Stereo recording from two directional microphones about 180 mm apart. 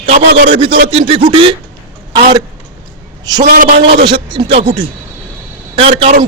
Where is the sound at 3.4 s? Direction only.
50° right (ahead or behind).